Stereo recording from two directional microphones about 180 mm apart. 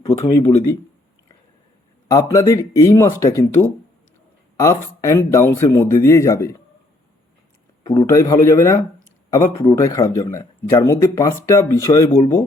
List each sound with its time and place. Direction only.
0.3 s speech: 25° left (ahead or behind)
2.0 s speech: 15° left (ahead or behind)
7.9 s speech: 20° left (ahead or behind)